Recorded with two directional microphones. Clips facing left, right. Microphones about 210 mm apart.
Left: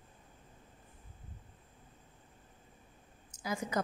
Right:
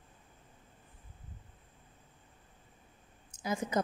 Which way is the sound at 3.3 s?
25° right (ahead or behind).